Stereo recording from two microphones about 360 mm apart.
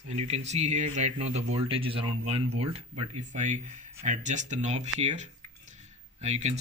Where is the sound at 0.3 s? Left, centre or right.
Centre.